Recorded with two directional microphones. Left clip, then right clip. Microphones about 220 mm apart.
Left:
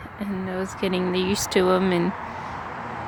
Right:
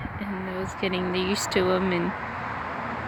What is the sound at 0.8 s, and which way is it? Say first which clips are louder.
Speech: left 2 dB; 20° left (ahead or behind).